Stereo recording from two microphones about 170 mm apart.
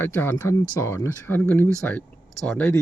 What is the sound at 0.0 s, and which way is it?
Speech, 15° left (ahead or behind).